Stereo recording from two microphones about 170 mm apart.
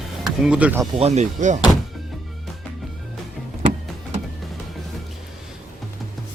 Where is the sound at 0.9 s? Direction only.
40° right (ahead or behind).